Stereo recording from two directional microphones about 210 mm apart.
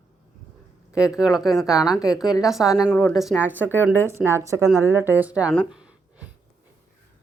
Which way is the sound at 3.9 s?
10° left (ahead or behind).